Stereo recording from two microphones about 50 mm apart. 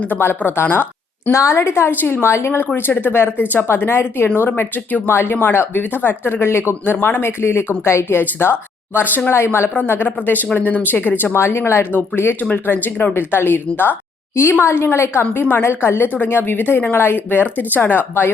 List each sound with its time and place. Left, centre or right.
0.2 s speech: left
1.3 s speech: left
1.9 s speech: left
2.3 s speech: left
2.7 s speech: left
5.0 s speech: left
9.7 s speech: left
11.3 s speech: left
14.6 s speech: left
15.2 s speech: left
15.6 s speech: left